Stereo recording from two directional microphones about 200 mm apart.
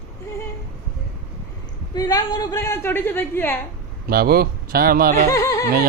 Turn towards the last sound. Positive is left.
turn(degrees=15)  # may be behind; listen again after turning